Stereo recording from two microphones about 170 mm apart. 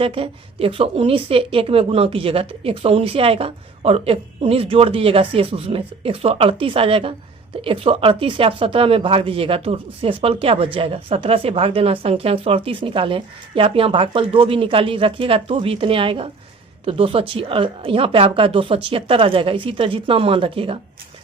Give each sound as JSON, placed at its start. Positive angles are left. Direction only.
{"t": 0.0, "sound": "a woman's voice", "side_deg": -35}